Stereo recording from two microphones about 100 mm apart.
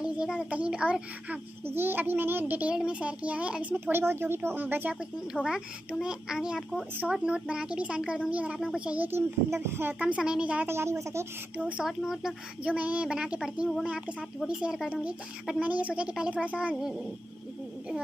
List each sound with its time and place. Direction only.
0.0 s a child's voice: 10° right (ahead or behind)
1.7 s a child's voice: 20° right (ahead or behind)
5.3 s a child's voice: 10° right (ahead or behind)
10.7 s a child's voice: 25° right (ahead or behind)
11.5 s a child's voice: 15° right (ahead or behind)